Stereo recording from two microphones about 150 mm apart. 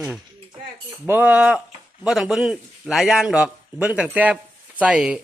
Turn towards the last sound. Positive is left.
turn(degrees=-5)  # may be behind; listen again after turning